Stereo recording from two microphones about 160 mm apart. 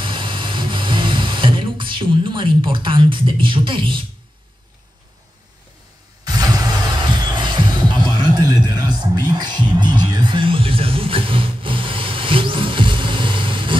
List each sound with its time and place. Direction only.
0.0 s a sound: 30° right (ahead or behind)
6.2 s vehicle: 25° right (ahead or behind)
7.3 s music: 30° right (ahead or behind)